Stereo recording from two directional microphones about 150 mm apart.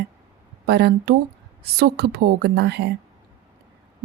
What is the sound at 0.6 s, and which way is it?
Speech, 90° right.